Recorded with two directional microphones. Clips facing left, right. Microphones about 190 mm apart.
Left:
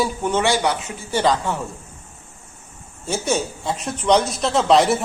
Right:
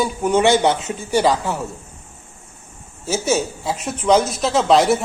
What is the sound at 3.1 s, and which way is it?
Speech, 5° right (ahead or behind).